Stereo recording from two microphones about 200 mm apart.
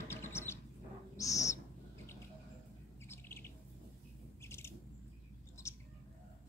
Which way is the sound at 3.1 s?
10° left (ahead or behind).